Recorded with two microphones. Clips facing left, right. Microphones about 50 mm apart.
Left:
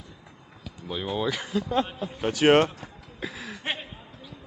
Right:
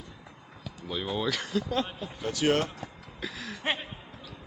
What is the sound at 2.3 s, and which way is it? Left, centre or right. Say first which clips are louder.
Speech: left 7 dB; left.